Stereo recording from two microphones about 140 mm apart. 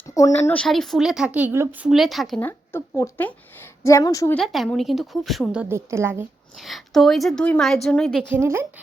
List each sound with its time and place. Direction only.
0.1 s speech: 25° left (ahead or behind)
0.5 s a woman's voice: 5° left (ahead or behind)
2.4 s a woman's voice: 15° left (ahead or behind)
4.4 s a woman's voice: centre (ahead or behind); by 6.2 s 20° right (ahead or behind)
6.6 s a woman's voice: centre (ahead or behind)
8.3 s a woman's voice: 20° right (ahead or behind)